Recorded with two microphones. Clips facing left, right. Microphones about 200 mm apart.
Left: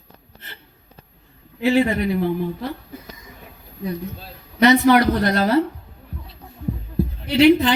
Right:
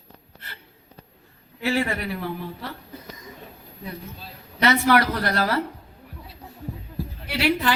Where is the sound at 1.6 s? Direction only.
20° left (ahead or behind).